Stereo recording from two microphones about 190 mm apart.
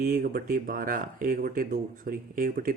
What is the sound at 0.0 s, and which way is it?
Speech, 50° right (ahead or behind).